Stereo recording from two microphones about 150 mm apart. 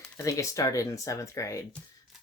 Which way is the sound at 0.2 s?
20° left (ahead or behind).